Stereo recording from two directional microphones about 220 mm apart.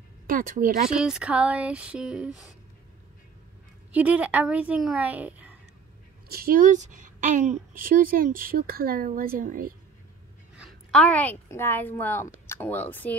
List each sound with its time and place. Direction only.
0.3 s a woman's voice: 40° right (ahead or behind)
0.9 s a sound: 5° right (ahead or behind)
3.9 s a woman's voice: 5° right (ahead or behind)
6.3 s a woman's voice: 40° right (ahead or behind)
10.6 s a woman's voice: 5° left (ahead or behind)